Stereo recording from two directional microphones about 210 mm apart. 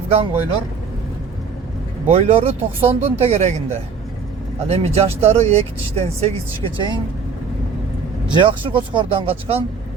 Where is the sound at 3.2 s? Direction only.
30° right (ahead or behind).